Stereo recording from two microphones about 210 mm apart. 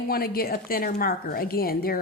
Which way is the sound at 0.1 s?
45° left (ahead or behind).